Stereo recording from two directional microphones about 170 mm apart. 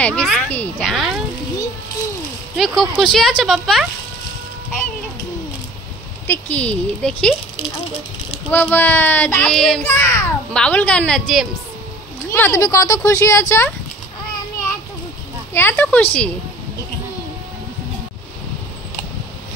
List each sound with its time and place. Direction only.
0.0 s speech: 5° left (ahead or behind)
2.5 s speech: centre (ahead or behind)
6.2 s a child's voice: 10° left (ahead or behind)
8.5 s a child's voice: 10° left (ahead or behind)
12.3 s a child's voice: 15° left (ahead or behind)
15.5 s a child's voice: 10° left (ahead or behind)